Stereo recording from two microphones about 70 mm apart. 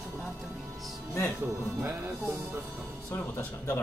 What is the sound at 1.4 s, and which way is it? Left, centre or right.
Speech, right.